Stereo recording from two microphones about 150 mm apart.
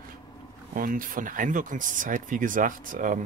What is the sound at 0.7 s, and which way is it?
Speech, 65° right (ahead or behind).